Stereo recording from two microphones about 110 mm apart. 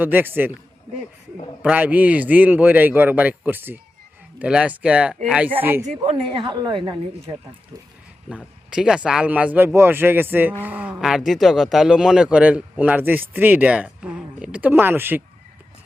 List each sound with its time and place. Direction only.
0.0 s a man's voice: 15° right (ahead or behind)
1.6 s a man's voice: 15° right (ahead or behind)
5.5 s speech: 20° right (ahead or behind)
5.8 s a woman's voice: 90° right
6.3 s a woman's voice: 40° right (ahead or behind)
8.7 s a man's voice: 5° right (ahead or behind)
11.0 s a man's voice: centre (ahead or behind); by 15.2 s 20° right (ahead or behind)